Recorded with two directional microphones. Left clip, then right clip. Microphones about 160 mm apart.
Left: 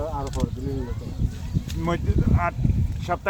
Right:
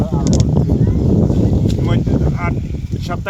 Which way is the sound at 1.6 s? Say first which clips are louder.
Right 8 dB; 5° left (ahead or behind).